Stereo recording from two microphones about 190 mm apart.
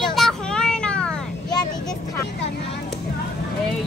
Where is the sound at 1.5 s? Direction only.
20° left (ahead or behind).